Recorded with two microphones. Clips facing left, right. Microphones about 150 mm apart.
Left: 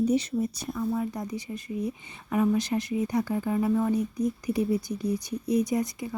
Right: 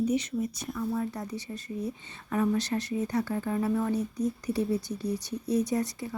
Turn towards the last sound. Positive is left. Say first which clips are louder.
# left 2 dB
turn(degrees=10)  # may be behind; listen again after turning